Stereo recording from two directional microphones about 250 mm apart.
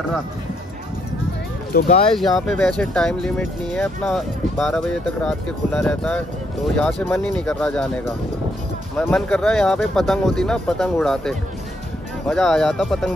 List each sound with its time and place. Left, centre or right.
1.7 s speech: left
2.1 s speech: centre